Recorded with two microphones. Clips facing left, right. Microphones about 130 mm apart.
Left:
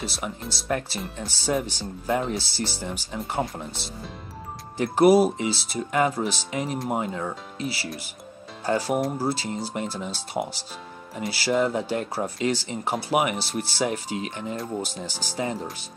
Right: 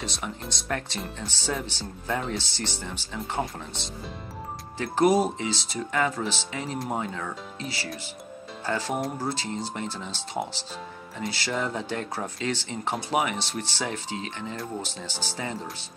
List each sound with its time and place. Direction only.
0.0 s speech: 5° left (ahead or behind)
4.7 s speech: 10° left (ahead or behind)